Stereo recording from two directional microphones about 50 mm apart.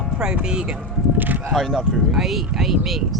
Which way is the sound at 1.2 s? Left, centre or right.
Right.